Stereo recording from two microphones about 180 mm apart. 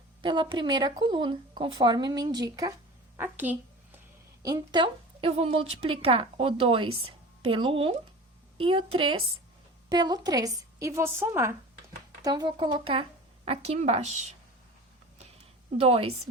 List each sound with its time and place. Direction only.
0.2 s speech: 25° right (ahead or behind)
3.2 s a sound: 10° right (ahead or behind)
4.4 s a woman's voice: 25° right (ahead or behind)
15.8 s a woman's voice: 30° right (ahead or behind)